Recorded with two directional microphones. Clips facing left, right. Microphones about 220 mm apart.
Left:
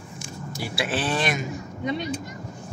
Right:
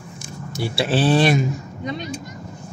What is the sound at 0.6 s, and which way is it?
Speech, 30° right (ahead or behind).